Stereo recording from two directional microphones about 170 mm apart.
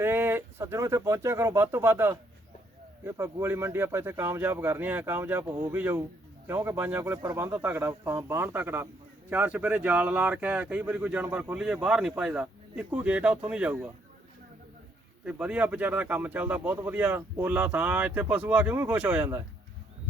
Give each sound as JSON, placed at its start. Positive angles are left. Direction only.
{"t": 0.0, "sound": "speech", "side_deg": -15}
{"t": 15.2, "sound": "speech", "side_deg": -5}